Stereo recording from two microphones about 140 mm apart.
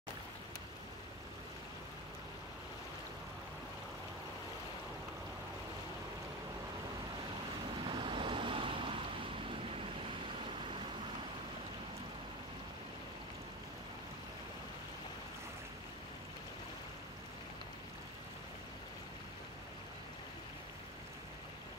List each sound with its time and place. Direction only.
7.8 s waves: 35° right (ahead or behind)